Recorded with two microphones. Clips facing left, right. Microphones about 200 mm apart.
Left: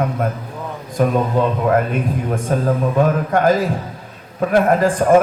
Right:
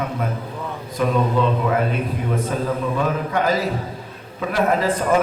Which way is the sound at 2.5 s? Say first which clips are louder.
Left 10 dB; 50° left (ahead or behind).